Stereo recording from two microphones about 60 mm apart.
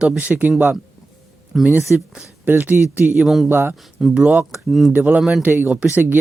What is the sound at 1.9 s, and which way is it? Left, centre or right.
Speech, right.